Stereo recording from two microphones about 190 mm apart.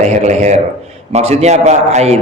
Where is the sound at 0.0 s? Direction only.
35° right (ahead or behind).